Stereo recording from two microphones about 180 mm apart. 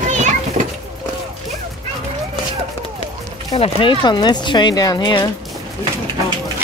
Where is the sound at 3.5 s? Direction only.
30° left (ahead or behind).